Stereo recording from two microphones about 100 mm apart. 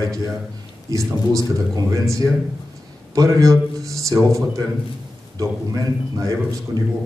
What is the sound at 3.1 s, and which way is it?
A man's voice, 35° right (ahead or behind).